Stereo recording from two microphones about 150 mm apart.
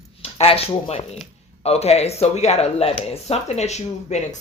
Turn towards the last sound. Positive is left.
turn(degrees=50)  # may be behind; listen again after turning